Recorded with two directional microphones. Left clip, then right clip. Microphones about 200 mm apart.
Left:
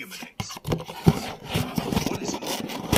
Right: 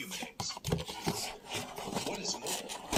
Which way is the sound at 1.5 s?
50° left (ahead or behind).